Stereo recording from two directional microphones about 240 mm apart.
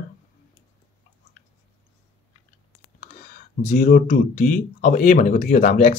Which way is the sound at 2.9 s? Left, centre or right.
Left.